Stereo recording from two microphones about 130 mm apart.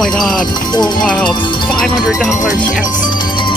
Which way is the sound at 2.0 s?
5° right (ahead or behind).